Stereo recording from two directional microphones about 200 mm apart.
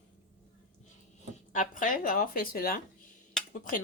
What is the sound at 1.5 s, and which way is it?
Speech, 40° left (ahead or behind).